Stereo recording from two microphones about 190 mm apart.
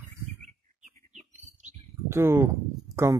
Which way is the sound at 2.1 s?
15° right (ahead or behind).